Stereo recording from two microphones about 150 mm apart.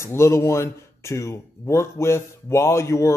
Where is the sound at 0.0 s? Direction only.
20° left (ahead or behind).